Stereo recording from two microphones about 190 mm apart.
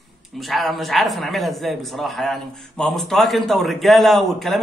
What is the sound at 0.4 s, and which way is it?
A man's voice, centre (ahead or behind).